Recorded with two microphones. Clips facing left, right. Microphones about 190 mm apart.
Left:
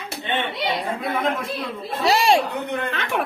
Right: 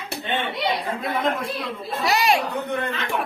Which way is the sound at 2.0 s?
25° left (ahead or behind).